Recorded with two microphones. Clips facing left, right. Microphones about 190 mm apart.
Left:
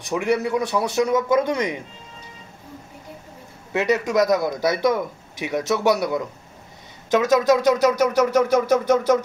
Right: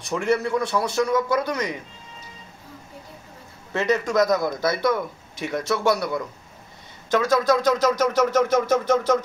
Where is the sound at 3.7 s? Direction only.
15° left (ahead or behind).